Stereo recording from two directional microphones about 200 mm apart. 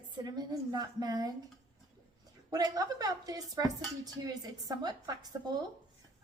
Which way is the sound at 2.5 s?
15° right (ahead or behind).